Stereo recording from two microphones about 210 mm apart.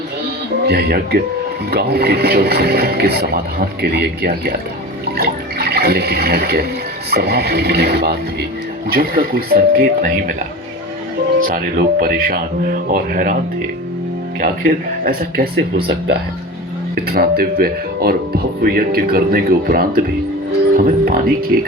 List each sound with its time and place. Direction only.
0.7 s speech: 50° right (ahead or behind)
11.3 s speech: 40° right (ahead or behind)
16.9 s speech: 45° right (ahead or behind)